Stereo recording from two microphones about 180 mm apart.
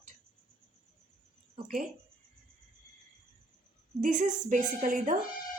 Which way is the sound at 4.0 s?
45° right (ahead or behind).